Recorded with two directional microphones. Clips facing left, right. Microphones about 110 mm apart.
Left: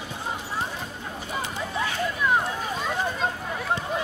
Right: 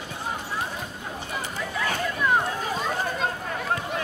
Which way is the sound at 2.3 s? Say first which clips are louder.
Right 1 dB; centre (ahead or behind).